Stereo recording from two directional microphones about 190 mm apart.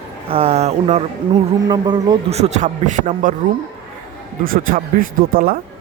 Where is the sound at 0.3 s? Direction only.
30° right (ahead or behind).